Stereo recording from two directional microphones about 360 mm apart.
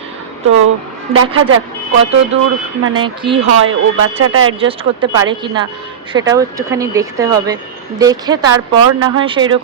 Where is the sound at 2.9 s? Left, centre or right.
Centre.